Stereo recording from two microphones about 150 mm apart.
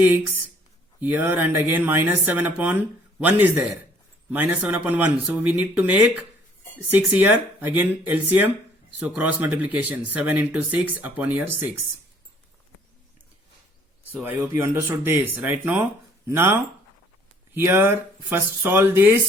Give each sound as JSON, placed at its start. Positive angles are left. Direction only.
{"t": 1.0, "sound": "speech", "side_deg": -10}
{"t": 14.1, "sound": "speech", "side_deg": -15}